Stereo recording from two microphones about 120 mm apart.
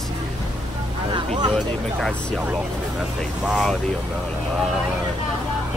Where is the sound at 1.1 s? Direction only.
40° right (ahead or behind).